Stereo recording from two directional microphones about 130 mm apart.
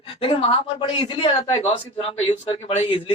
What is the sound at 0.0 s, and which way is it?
A woman's voice, 40° left (ahead or behind).